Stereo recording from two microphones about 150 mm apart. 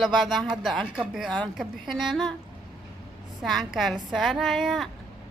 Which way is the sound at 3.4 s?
Centre (ahead or behind).